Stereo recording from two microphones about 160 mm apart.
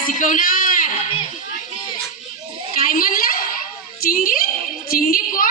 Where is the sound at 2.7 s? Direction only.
65° left (ahead or behind).